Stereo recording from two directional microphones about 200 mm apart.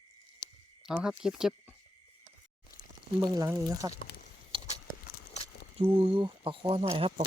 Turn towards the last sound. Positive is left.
turn(degrees=-30)  # may be behind; listen again after turning